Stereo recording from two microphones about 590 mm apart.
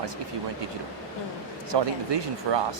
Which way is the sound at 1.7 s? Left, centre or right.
Right.